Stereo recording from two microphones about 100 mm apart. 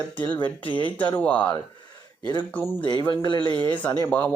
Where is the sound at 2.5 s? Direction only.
15° left (ahead or behind).